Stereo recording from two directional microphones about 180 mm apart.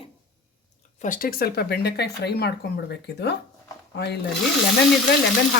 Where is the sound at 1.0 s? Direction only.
50° left (ahead or behind); by 4.1 s 65° left (ahead or behind).